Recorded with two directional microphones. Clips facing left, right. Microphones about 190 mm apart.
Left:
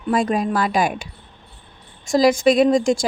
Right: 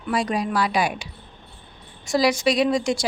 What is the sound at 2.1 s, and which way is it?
Speech, 50° left (ahead or behind).